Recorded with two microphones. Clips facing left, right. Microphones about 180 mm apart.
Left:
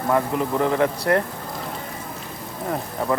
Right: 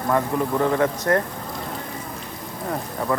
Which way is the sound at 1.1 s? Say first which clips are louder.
Left 1 dB; 35° right (ahead or behind).